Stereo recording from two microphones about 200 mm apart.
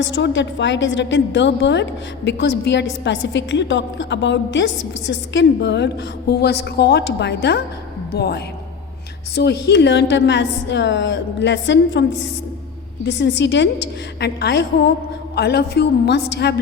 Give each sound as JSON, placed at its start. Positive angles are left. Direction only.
{"t": 0.0, "sound": "a woman's voice", "side_deg": 65}